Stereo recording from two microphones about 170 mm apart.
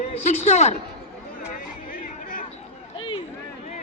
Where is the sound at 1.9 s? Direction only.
50° left (ahead or behind).